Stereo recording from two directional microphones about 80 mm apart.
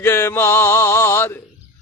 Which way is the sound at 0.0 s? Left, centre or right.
Left.